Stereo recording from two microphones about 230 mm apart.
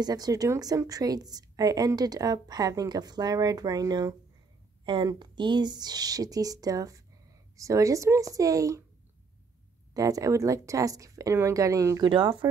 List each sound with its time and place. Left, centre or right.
0.0 s a woman's voice: centre
9.9 s a woman's voice: centre